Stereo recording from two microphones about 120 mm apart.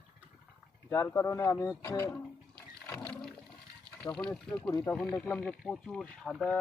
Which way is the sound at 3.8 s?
10° left (ahead or behind).